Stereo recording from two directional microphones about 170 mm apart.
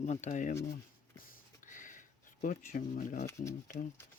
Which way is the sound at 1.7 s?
50° left (ahead or behind).